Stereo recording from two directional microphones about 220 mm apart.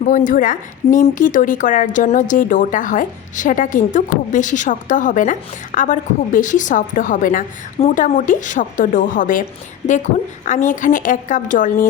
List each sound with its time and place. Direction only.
0.0 s a woman's voice: 35° left (ahead or behind)